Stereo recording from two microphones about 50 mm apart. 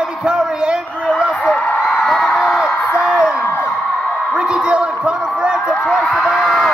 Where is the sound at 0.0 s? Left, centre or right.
Centre.